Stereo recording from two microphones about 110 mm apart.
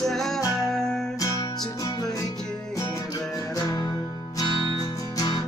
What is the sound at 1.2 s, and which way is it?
Music, 30° left (ahead or behind).